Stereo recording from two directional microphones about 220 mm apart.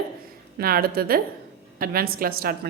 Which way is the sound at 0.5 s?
45° right (ahead or behind).